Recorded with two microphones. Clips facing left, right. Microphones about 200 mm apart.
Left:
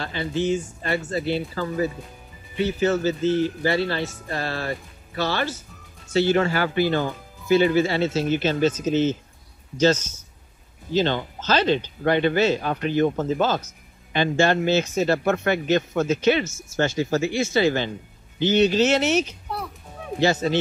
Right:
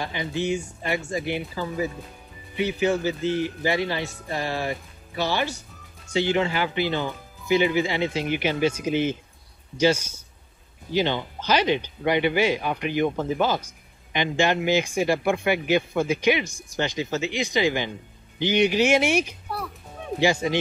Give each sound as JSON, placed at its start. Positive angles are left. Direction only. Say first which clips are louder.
{"t": 0.0, "sound": "speech", "louder": "left 2 dB", "side_deg": -15}